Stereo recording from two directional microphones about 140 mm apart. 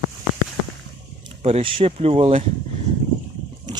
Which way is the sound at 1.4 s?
45° right (ahead or behind).